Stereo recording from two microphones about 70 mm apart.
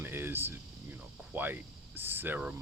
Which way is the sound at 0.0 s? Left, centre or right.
Right.